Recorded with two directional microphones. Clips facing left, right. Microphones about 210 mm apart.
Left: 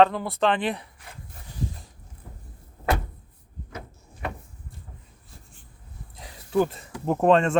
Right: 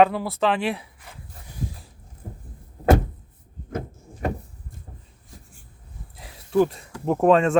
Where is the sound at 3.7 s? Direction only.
45° right (ahead or behind).